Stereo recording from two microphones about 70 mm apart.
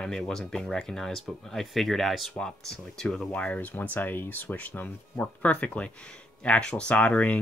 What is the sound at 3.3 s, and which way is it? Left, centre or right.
Speech, left.